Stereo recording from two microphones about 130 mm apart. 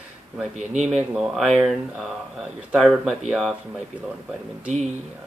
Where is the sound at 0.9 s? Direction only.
5° right (ahead or behind).